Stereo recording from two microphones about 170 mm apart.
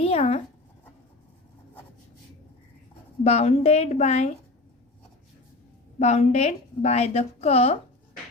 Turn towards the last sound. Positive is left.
turn(degrees=35)  # may be behind; listen again after turning